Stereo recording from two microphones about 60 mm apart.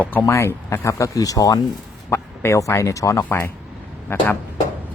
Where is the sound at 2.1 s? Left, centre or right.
Left.